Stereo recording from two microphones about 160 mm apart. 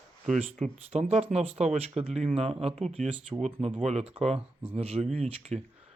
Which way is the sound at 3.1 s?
5° right (ahead or behind).